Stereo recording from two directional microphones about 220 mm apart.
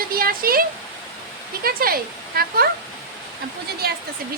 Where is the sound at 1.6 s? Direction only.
40° right (ahead or behind).